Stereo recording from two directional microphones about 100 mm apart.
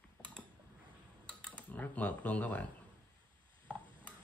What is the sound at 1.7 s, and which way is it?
Speech, 15° left (ahead or behind).